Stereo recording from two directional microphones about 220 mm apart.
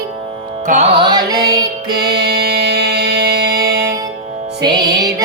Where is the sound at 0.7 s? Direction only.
35° right (ahead or behind).